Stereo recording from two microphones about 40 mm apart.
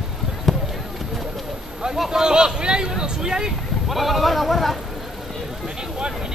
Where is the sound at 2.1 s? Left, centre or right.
Centre.